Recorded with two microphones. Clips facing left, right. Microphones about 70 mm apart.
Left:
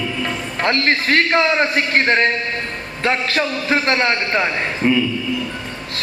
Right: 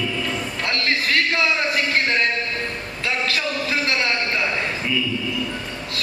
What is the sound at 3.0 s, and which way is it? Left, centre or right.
A man's voice, left.